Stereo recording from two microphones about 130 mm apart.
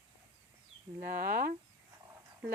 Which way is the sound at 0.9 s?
90° right.